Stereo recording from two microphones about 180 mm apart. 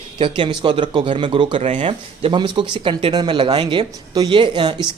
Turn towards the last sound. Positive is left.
turn(degrees=-25)  # may be behind; listen again after turning